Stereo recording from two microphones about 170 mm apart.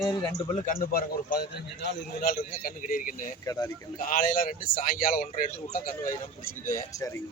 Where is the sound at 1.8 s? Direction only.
75° left (ahead or behind); by 3.3 s 55° left (ahead or behind).